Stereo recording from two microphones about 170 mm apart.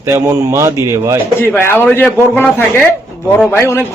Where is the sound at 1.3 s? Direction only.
15° left (ahead or behind).